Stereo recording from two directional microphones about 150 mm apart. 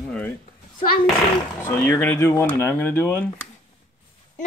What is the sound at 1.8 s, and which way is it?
A child's voice, 10° left (ahead or behind).